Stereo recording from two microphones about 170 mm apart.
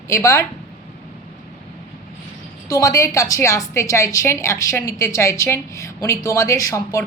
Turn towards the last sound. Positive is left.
turn(degrees=20)  # may be behind; listen again after turning